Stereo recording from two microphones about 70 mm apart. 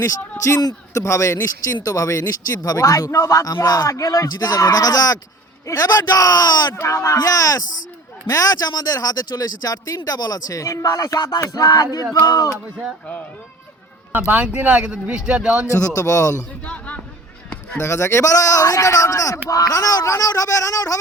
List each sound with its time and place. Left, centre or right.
0.0 s a man's voice: left
6.7 s a man's voice: left
10.6 s a man's voice: left
11.3 s a man's voice: left
14.3 s speech: right
15.7 s a man's voice: left
16.6 s a sound: centre
17.7 s a man's voice: left